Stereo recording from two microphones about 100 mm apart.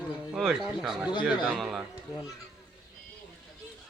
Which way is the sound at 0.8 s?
5° right (ahead or behind).